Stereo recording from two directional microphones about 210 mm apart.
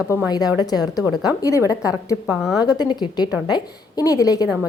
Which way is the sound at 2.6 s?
20° left (ahead or behind).